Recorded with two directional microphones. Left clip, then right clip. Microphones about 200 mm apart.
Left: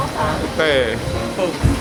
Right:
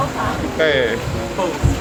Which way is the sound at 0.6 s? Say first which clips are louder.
Even; 30° left (ahead or behind).